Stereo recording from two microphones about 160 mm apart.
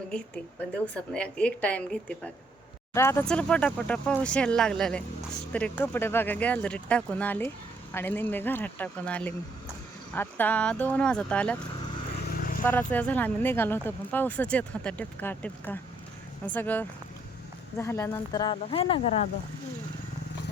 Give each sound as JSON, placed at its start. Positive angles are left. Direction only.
{"t": 1.1, "sound": "speech", "side_deg": 5}
{"t": 3.2, "sound": "speech", "side_deg": 5}
{"t": 12.6, "sound": "speech", "side_deg": 10}
{"t": 18.5, "sound": "speech", "side_deg": 40}